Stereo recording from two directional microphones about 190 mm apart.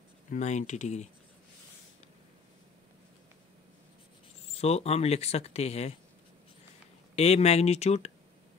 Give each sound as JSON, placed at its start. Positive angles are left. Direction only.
{"t": 0.3, "sound": "speech", "side_deg": 40}
{"t": 4.6, "sound": "speech", "side_deg": 35}
{"t": 7.2, "sound": "speech", "side_deg": 35}